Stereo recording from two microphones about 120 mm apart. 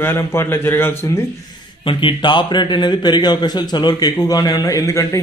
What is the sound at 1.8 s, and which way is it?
A man's voice, 45° left (ahead or behind).